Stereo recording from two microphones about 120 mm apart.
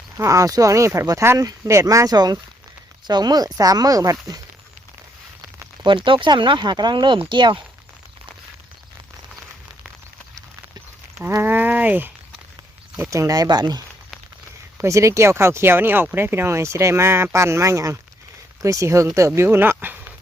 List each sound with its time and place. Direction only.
0.2 s speech: 25° right (ahead or behind)
6.1 s speech: 40° right (ahead or behind)
11.2 s speech: 20° right (ahead or behind)
13.1 s speech: 30° right (ahead or behind)